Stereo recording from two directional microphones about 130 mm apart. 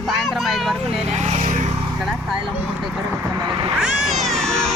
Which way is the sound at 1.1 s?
60° right (ahead or behind).